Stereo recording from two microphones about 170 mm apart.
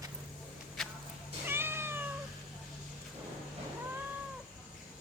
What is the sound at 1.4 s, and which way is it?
Cat, 15° right (ahead or behind).